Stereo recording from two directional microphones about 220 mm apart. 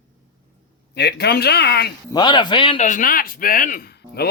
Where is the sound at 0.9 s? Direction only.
50° left (ahead or behind).